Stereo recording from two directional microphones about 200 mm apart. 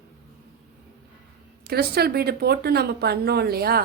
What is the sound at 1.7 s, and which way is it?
A woman's voice, 50° right (ahead or behind).